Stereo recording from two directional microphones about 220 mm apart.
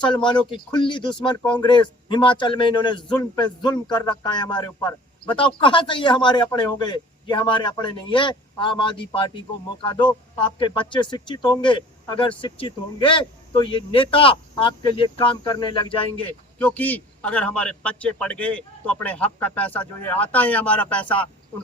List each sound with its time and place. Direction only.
0.0 s speech: 20° left (ahead or behind)
16.6 s a man's voice: 5° left (ahead or behind)